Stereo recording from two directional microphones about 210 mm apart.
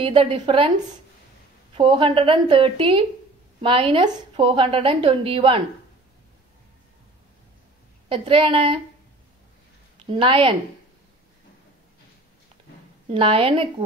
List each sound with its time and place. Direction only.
0.0 s a woman's voice: 25° right (ahead or behind)
1.8 s a woman's voice: 25° right (ahead or behind)
8.1 s a woman's voice: 25° right (ahead or behind)
10.1 s a woman's voice: 25° right (ahead or behind)
13.1 s a woman's voice: 25° right (ahead or behind)